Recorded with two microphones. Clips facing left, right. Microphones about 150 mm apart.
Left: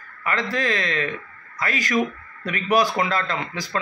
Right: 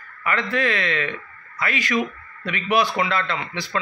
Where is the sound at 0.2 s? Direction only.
35° left (ahead or behind).